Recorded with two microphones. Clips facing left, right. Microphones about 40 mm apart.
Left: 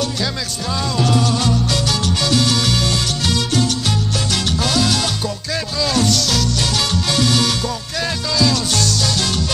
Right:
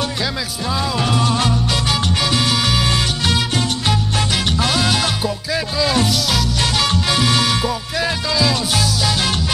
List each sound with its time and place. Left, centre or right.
0.9 s salsa music: right
4.6 s music: centre